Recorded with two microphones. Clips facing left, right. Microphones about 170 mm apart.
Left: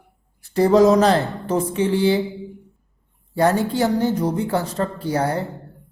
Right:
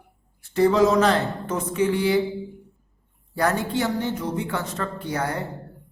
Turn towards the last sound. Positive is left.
turn(degrees=30)  # may be behind; listen again after turning